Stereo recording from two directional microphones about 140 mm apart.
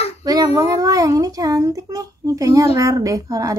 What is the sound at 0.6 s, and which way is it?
A child's voice, 25° right (ahead or behind).